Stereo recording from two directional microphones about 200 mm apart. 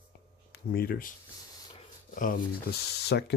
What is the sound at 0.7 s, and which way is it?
Speech, 50° left (ahead or behind).